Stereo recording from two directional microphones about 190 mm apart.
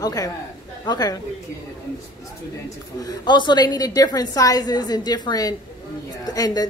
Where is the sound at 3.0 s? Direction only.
20° left (ahead or behind).